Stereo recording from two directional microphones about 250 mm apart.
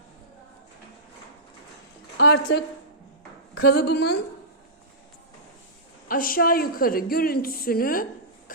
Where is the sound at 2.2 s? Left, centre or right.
Left.